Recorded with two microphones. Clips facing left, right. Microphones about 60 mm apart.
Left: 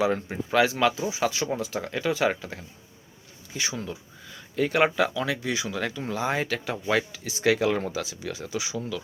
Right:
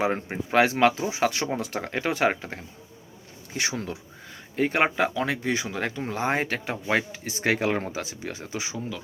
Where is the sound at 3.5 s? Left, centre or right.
Right.